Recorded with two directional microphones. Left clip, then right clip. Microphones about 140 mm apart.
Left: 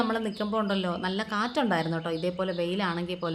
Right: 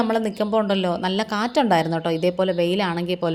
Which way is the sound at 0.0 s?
35° right (ahead or behind).